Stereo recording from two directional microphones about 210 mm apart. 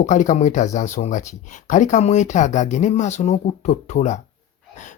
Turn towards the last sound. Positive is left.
turn(degrees=35)  # may be behind; listen again after turning